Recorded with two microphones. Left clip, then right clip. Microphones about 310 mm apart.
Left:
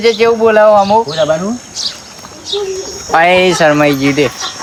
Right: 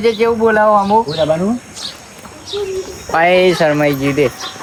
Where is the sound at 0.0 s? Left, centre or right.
Left.